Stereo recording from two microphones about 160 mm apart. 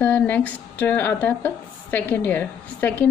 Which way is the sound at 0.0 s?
10° left (ahead or behind).